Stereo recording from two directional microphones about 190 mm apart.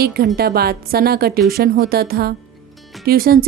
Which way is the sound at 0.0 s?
55° right (ahead or behind).